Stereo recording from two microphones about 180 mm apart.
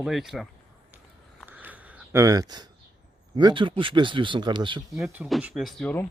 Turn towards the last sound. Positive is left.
turn(degrees=10)  # may be behind; listen again after turning